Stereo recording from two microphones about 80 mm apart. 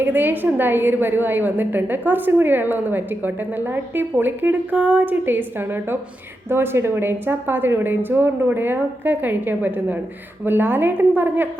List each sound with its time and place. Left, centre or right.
0.0 s a woman's voice: right